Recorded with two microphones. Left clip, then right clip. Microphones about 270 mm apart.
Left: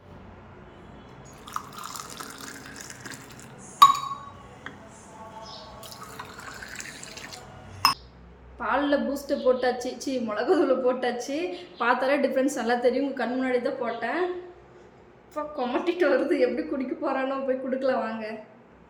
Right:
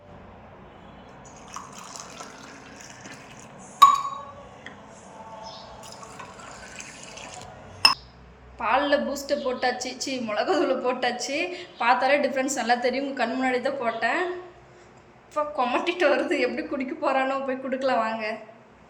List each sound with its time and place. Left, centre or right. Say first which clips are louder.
1.8 s water: left 2 dB; left
8.5 s a woman's voice: right 3 dB; centre
15.4 s a woman's voice: right 4 dB; centre